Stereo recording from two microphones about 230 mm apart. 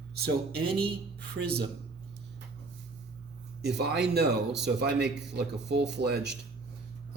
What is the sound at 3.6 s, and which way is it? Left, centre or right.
Speech, right.